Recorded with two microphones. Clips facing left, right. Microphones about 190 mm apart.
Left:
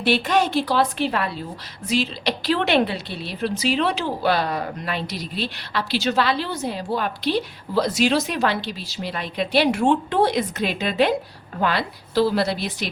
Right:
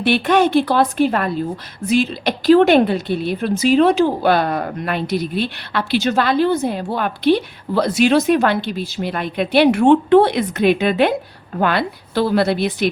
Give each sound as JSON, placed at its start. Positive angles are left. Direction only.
{"t": 0.0, "sound": "a woman's voice", "side_deg": -55}